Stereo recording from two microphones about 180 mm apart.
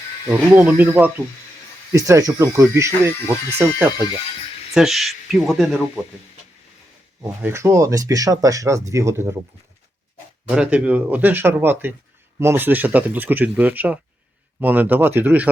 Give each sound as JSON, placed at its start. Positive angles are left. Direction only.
{"t": 0.3, "sound": "speech", "side_deg": -5}
{"t": 7.4, "sound": "speech", "side_deg": -15}
{"t": 10.5, "sound": "speech", "side_deg": -5}